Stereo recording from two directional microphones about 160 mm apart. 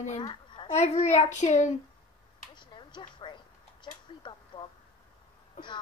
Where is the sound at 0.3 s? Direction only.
30° left (ahead or behind).